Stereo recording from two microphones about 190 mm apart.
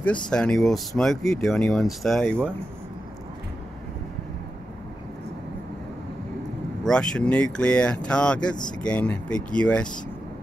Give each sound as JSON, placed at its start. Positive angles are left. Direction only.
{"t": 0.0, "sound": "speech", "side_deg": 5}
{"t": 6.8, "sound": "speech", "side_deg": 5}